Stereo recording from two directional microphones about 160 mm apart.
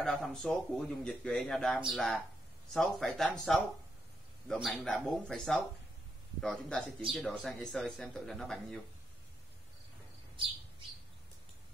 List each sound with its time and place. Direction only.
0.0 s speech: 5° left (ahead or behind)